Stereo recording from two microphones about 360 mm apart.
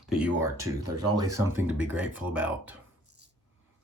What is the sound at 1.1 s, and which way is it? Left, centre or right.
Speech, centre.